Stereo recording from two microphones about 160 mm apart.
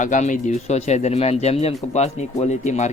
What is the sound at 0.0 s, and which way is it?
Speech, 50° left (ahead or behind).